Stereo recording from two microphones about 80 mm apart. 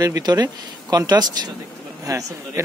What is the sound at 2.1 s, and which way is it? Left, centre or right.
Speech, right.